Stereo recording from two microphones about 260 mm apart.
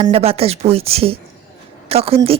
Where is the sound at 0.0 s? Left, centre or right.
Right.